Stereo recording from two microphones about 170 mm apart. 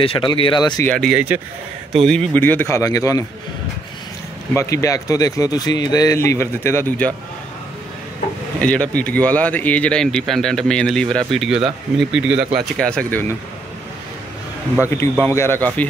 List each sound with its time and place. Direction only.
0.0 s speech: 30° left (ahead or behind)
0.8 s speech: centre (ahead or behind); by 3.3 s 20° left (ahead or behind)
4.6 s speech: 20° left (ahead or behind)
8.5 s speech: 10° left (ahead or behind)
15.1 s speech: 15° left (ahead or behind)